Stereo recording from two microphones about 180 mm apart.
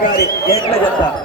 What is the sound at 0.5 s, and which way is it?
Speech, 20° left (ahead or behind).